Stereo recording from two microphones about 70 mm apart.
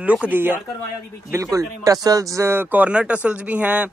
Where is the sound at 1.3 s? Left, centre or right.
Right.